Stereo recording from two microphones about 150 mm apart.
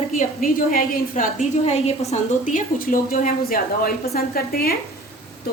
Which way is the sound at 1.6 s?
45° left (ahead or behind).